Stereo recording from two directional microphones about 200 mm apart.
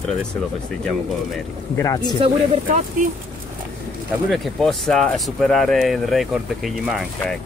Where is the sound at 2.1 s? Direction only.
30° right (ahead or behind).